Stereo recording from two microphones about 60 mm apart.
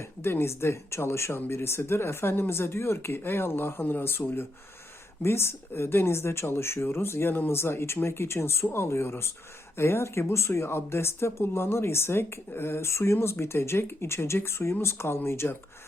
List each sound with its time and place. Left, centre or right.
0.0 s speech: left